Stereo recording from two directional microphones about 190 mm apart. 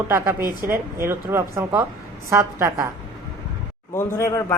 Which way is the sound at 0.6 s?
50° right (ahead or behind).